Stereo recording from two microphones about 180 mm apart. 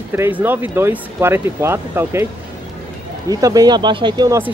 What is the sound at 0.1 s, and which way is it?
Speech, 10° right (ahead or behind).